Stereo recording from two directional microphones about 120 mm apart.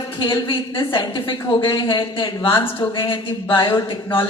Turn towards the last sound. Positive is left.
turn(degrees=40)  # may be behind; listen again after turning